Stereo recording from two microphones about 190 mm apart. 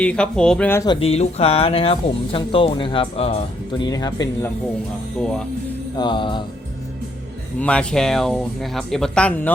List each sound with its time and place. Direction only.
0.0 s speech: 5° left (ahead or behind)
0.9 s speech: 30° left (ahead or behind)
6.0 s speech: 25° left (ahead or behind)
7.6 s speech: 5° left (ahead or behind)